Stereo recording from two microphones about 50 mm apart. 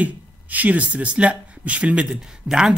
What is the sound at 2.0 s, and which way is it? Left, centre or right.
Speech, centre.